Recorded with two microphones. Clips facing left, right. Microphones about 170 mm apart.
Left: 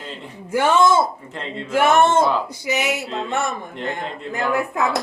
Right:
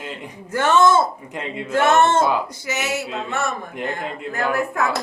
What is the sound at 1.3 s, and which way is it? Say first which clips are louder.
Speech: right 2 dB; 10° right (ahead or behind).